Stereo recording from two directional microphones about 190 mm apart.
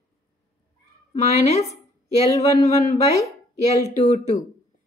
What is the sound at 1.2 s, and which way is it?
Speech, 35° left (ahead or behind).